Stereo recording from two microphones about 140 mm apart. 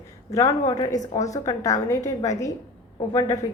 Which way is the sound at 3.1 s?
30° left (ahead or behind).